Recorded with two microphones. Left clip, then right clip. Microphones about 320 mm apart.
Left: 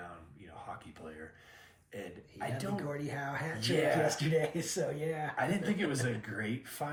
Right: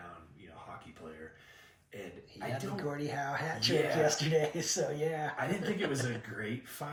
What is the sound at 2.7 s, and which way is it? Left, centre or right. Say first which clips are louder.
Speech: right 2 dB; centre.